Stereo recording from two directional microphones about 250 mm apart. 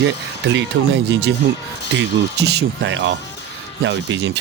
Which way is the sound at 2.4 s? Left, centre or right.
Right.